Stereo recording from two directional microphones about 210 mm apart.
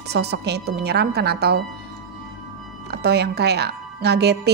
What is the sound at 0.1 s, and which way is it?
A woman's voice, 50° right (ahead or behind).